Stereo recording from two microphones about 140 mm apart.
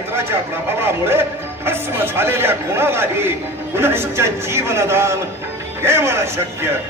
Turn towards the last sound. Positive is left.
turn(degrees=-20)  # may be behind; listen again after turning